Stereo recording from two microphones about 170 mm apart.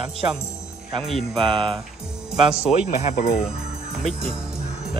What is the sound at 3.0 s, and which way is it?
Speech, 55° left (ahead or behind).